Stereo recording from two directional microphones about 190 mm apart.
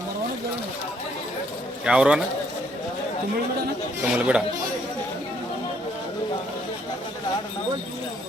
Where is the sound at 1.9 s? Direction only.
5° right (ahead or behind).